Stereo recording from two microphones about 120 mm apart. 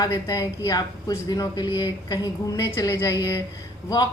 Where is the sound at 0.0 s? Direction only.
30° left (ahead or behind).